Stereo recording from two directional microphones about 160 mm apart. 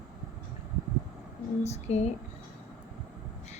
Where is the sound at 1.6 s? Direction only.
45° left (ahead or behind).